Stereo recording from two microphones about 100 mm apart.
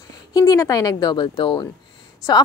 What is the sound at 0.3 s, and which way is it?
A woman's voice, 35° left (ahead or behind).